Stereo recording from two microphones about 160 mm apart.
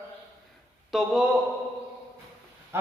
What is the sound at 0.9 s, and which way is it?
Speech, centre (ahead or behind).